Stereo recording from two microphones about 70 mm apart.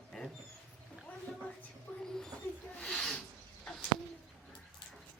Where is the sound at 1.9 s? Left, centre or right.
Left.